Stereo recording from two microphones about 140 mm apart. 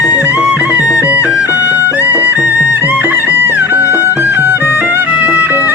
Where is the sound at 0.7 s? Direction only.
25° left (ahead or behind).